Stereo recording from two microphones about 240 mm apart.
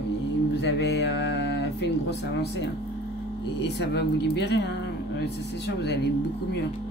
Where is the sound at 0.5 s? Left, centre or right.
Left.